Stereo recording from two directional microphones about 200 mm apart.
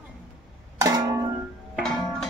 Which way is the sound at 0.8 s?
15° right (ahead or behind).